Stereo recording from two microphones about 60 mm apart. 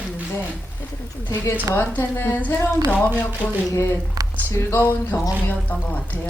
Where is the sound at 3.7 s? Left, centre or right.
Left.